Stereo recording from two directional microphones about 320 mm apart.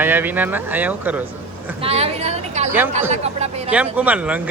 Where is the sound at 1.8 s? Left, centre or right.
Centre.